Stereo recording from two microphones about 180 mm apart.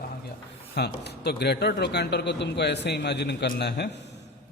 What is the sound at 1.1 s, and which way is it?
A man's voice, 65° left (ahead or behind).